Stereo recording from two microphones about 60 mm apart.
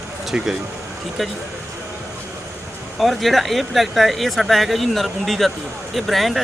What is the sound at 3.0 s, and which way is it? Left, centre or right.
Speech, centre.